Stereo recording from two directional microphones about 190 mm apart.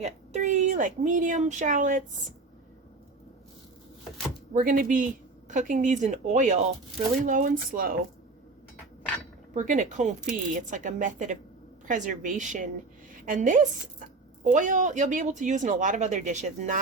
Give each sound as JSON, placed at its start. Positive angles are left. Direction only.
{"t": 0.0, "sound": "speech", "side_deg": -40}
{"t": 4.5, "sound": "speech", "side_deg": -45}
{"t": 9.6, "sound": "speech", "side_deg": -40}